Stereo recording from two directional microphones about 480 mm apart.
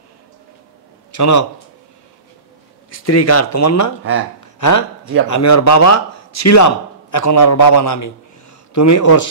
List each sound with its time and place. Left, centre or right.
1.1 s a man's voice: left
2.9 s speech: left